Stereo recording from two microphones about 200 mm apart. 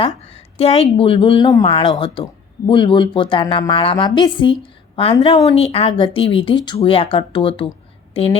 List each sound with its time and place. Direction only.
0.0 s a woman's voice: 30° left (ahead or behind)